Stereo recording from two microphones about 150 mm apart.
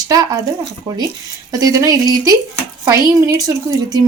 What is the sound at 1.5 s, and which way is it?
Speech, 25° right (ahead or behind).